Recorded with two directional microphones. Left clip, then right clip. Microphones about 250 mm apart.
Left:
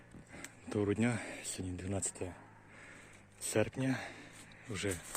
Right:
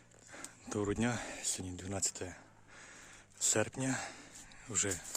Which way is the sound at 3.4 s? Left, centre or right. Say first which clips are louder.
Even; centre.